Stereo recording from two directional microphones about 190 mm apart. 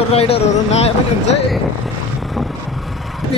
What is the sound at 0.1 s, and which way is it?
Speech, 30° left (ahead or behind).